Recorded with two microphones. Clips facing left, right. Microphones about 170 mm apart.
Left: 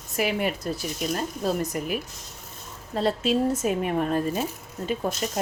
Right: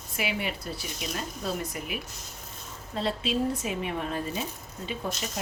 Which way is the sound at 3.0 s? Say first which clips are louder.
Left 5 dB; 45° left (ahead or behind).